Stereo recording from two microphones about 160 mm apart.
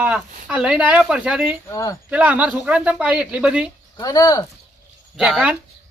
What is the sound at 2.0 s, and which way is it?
Speech, 10° right (ahead or behind).